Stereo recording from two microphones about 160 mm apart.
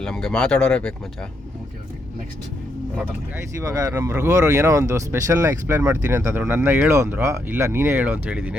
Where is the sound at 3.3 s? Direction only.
20° right (ahead or behind).